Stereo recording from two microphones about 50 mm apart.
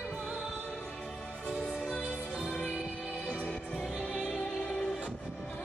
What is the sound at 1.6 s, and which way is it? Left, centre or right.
Music, centre.